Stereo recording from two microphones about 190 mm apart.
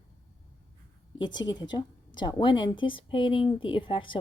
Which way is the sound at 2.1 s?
25° left (ahead or behind).